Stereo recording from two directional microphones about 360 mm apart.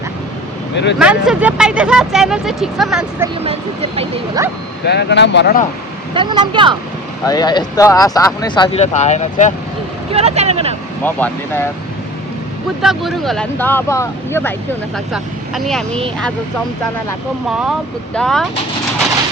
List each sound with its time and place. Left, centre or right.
0.9 s speech: centre
3.4 s speech: centre
4.9 s speech: left
6.1 s speech: centre
7.3 s speech: centre
10.1 s speech: centre
11.0 s speech: centre
12.8 s speech: centre
17.6 s speech: centre